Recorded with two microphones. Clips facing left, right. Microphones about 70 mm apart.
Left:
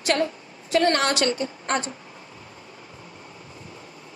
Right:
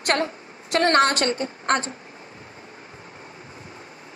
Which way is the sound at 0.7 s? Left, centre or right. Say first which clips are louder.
Right 1 dB; right.